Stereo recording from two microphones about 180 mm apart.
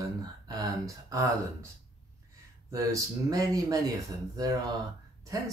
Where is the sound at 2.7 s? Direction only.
20° right (ahead or behind).